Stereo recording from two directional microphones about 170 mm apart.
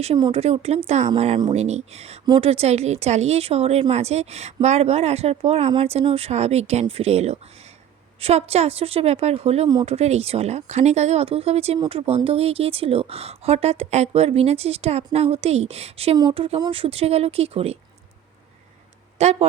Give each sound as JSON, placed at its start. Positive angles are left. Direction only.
{"t": 0.0, "sound": "speech", "side_deg": -35}
{"t": 9.6, "sound": "speech", "side_deg": -25}
{"t": 9.9, "sound": "speech", "side_deg": -40}
{"t": 19.2, "sound": "speech", "side_deg": -40}